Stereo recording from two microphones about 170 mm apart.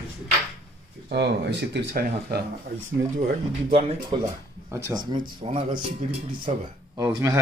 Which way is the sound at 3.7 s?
35° right (ahead or behind).